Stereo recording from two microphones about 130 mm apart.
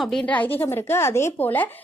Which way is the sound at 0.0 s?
5° left (ahead or behind).